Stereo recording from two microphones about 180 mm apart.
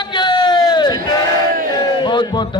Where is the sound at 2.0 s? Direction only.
25° left (ahead or behind).